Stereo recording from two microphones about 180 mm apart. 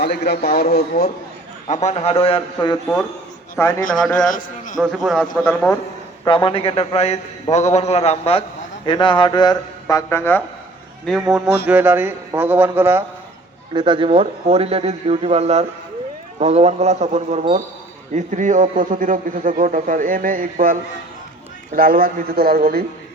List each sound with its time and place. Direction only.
0.0 s a man's voice: 65° left (ahead or behind)
1.6 s a man's voice: 40° left (ahead or behind)
3.5 s a man's voice: 15° left (ahead or behind)
4.3 s a man's voice: 45° left (ahead or behind)
5.1 s a man's voice: centre (ahead or behind)
6.2 s a man's voice: 30° left (ahead or behind)
9.8 s speech: 15° left (ahead or behind)
11.0 s a man's voice: centre (ahead or behind)
11.6 s speech: 10° right (ahead or behind)
13.7 s a man's voice: 25° right (ahead or behind); by 22.8 s 60° right (ahead or behind)